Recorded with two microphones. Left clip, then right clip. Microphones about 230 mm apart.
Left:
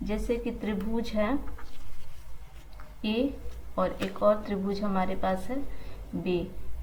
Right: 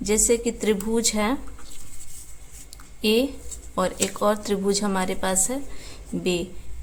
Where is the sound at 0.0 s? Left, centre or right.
Right.